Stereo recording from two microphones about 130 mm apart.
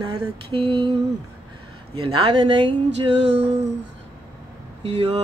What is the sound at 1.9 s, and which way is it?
Mantra, 45° right (ahead or behind).